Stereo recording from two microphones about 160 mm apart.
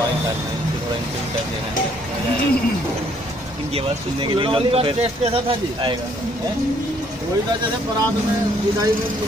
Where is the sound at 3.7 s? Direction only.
35° right (ahead or behind).